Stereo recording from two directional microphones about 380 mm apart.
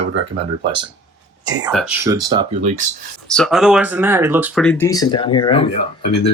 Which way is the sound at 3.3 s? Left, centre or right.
Centre.